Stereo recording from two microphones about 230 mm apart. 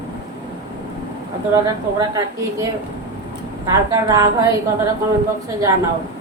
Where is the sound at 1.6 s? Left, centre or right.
Centre.